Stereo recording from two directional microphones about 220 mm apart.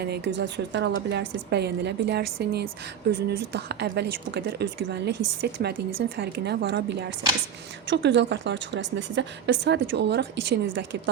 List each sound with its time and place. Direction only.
0.0 s speech: 50° right (ahead or behind)